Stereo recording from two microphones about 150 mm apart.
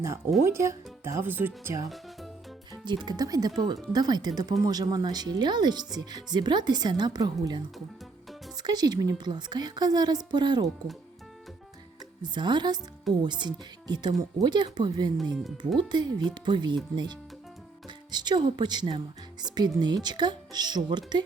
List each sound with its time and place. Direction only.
0.4 s speech: 20° right (ahead or behind)
2.8 s speech: 30° right (ahead or behind)
12.2 s speech: 30° right (ahead or behind)